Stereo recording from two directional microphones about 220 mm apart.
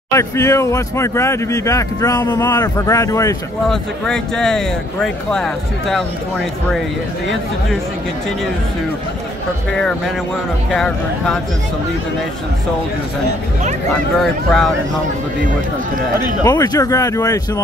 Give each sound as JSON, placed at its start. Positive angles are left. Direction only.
{"t": 0.1, "sound": "speech", "side_deg": 15}
{"t": 3.7, "sound": "speech", "side_deg": 0}
{"t": 10.7, "sound": "speech", "side_deg": 0}
{"t": 14.2, "sound": "speech", "side_deg": 0}
{"t": 16.4, "sound": "speech", "side_deg": 15}